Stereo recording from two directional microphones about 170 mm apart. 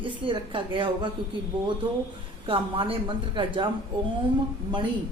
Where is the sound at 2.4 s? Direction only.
30° right (ahead or behind).